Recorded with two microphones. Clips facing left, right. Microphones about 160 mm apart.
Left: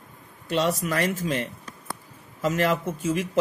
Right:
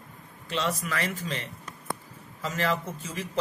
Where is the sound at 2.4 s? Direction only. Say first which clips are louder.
Left 5 dB; 50° left (ahead or behind).